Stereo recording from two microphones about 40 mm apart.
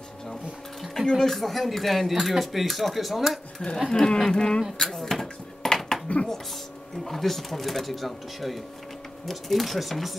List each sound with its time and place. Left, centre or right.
0.9 s speech: centre
3.9 s speech: centre
4.7 s dishes: centre
6.1 s speech: left
7.1 s speech: centre